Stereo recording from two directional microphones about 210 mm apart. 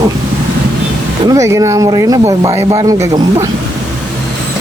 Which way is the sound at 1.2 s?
15° right (ahead or behind).